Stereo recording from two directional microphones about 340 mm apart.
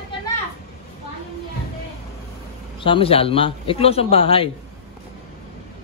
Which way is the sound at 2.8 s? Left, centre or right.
Centre.